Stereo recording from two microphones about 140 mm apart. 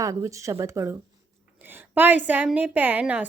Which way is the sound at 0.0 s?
25° right (ahead or behind).